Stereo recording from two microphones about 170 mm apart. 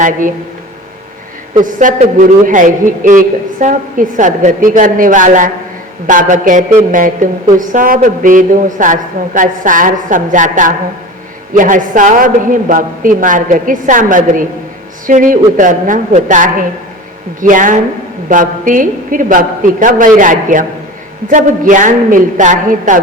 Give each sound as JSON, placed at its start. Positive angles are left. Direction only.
{"t": 0.0, "sound": "a man's voice", "side_deg": -50}
{"t": 1.5, "sound": "a man's voice", "side_deg": -50}